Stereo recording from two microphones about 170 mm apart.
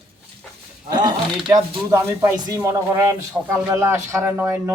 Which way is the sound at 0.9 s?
25° right (ahead or behind).